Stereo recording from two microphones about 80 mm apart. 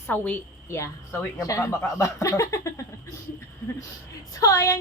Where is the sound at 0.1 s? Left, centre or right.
Left.